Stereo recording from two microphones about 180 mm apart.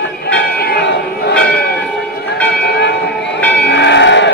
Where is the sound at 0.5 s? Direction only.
60° left (ahead or behind).